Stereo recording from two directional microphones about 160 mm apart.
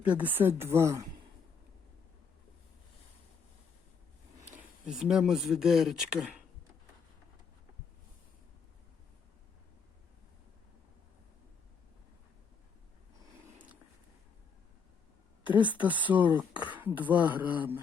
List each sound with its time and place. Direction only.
0.0 s speech: 10° right (ahead or behind)
4.4 s speech: 10° right (ahead or behind)
15.4 s speech: 10° right (ahead or behind)